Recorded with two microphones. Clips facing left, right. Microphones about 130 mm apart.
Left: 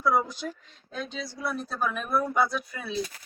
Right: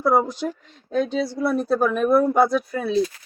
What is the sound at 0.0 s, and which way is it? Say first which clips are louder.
A woman's voice: right 6 dB; 70° right (ahead or behind).